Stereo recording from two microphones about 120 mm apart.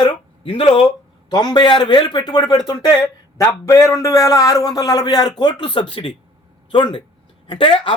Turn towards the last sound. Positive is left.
turn(degrees=45)  # may be behind; listen again after turning